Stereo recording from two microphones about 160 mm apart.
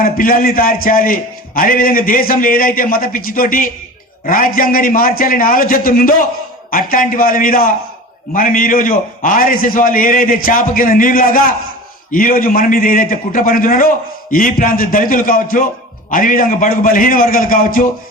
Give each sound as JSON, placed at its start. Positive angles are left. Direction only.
{"t": 0.0, "sound": "a man's voice", "side_deg": 60}